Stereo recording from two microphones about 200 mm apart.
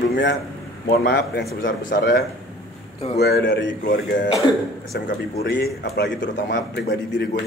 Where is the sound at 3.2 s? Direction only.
60° left (ahead or behind).